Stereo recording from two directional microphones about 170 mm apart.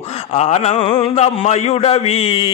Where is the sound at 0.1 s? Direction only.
40° left (ahead or behind).